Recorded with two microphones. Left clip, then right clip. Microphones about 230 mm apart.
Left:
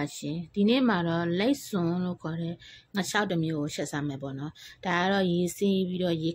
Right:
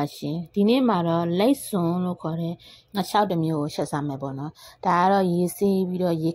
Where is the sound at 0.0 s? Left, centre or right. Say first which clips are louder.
Right 5 dB; centre.